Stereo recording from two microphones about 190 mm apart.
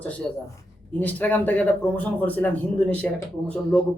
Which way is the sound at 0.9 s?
10° left (ahead or behind).